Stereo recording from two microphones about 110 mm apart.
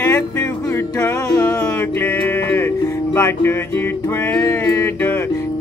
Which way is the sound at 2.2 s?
20° left (ahead or behind).